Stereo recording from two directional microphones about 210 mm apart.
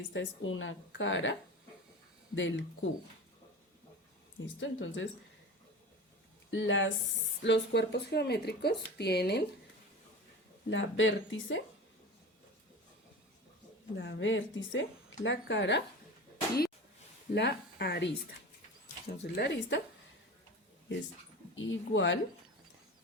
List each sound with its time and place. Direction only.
0.1 s a woman's voice: 65° left (ahead or behind)
4.4 s a woman's voice: 65° left (ahead or behind)
6.5 s a woman's voice: 65° left (ahead or behind)
10.7 s a woman's voice: 65° left (ahead or behind)
13.9 s a woman's voice: 60° left (ahead or behind)
17.3 s speech: 55° left (ahead or behind)
19.2 s a woman's voice: 55° left (ahead or behind)
21.5 s a woman's voice: 65° left (ahead or behind)